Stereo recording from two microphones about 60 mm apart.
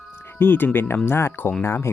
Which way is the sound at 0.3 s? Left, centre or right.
Left.